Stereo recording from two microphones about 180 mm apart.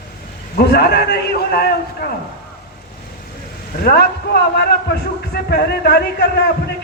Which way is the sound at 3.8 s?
60° left (ahead or behind).